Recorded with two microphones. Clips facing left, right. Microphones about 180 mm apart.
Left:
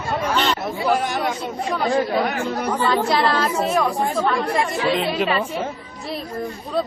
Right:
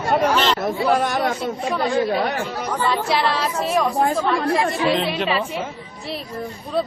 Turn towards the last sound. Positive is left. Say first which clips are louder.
# even
turn(degrees=0)  # may be behind; listen again after turning